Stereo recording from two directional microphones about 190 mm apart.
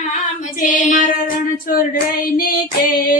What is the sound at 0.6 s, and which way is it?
Child singing, 40° left (ahead or behind).